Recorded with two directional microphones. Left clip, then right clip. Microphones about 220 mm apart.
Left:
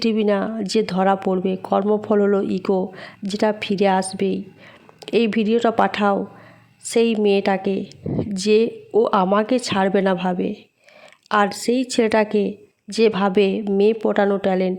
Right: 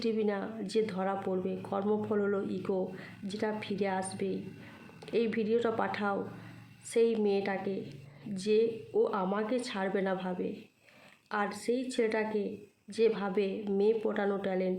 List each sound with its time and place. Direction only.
0.0 s a woman's voice: 40° left (ahead or behind)